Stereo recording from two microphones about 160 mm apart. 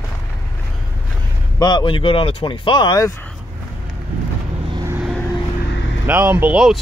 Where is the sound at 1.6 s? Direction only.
30° left (ahead or behind).